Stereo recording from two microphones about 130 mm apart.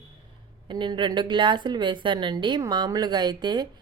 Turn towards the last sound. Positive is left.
turn(degrees=-35)  # may be behind; listen again after turning